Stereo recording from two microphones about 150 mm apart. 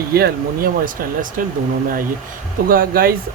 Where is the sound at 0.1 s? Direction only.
90° right; by 1.3 s 70° right (ahead or behind).